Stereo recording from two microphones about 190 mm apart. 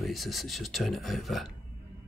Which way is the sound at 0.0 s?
Centre (ahead or behind).